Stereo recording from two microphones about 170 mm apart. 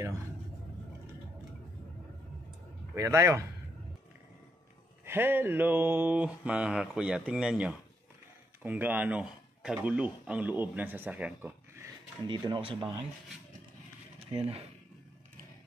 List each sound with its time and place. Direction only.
2.9 s a man's voice: 20° right (ahead or behind)
5.0 s mantra: 10° right (ahead or behind)
8.6 s speech: 10° right (ahead or behind)
9.8 s mantra: 10° right (ahead or behind)
12.3 s speech: 25° right (ahead or behind)
14.3 s speech: 35° right (ahead or behind)